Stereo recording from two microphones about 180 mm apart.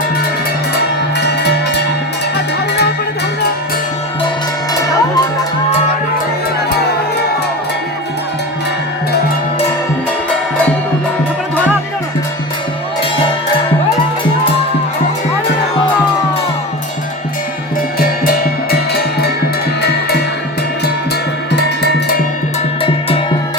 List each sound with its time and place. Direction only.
4.7 s cowbell: 20° left (ahead or behind)
22.8 s music: 30° left (ahead or behind)